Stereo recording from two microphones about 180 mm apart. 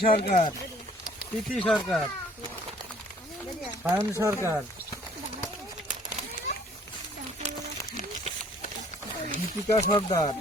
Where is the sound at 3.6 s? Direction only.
10° right (ahead or behind).